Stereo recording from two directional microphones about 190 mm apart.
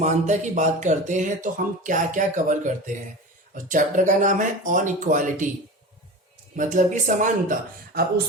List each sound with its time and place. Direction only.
0.0 s speech: 40° right (ahead or behind)
6.6 s speech: 40° right (ahead or behind)